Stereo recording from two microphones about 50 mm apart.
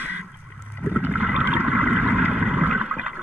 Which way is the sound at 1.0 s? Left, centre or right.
Right.